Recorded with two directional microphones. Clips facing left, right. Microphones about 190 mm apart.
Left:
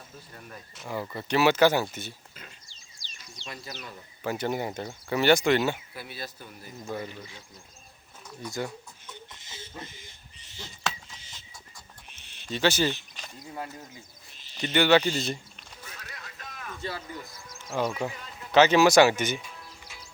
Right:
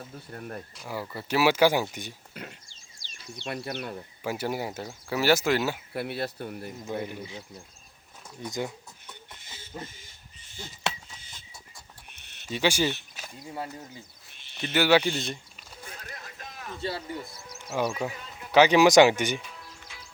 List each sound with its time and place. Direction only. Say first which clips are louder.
0.3 s speech: right 9 dB; 55° right (ahead or behind)
0.8 s speech: left 4 dB; 5° right (ahead or behind)
2.3 s a sound: right 8 dB; 60° right (ahead or behind)
4.2 s speech: left 1 dB; 10° right (ahead or behind)
5.9 s speech: right 9 dB; 60° right (ahead or behind)
8.4 s speech: right 1 dB; 15° right (ahead or behind)
12.5 s speech: left 1 dB; 10° right (ahead or behind)
14.6 s speech: left 1 dB; 5° right (ahead or behind)
15.8 s a sound: right 3 dB; 30° right (ahead or behind)
17.6 s speech: even; 10° right (ahead or behind)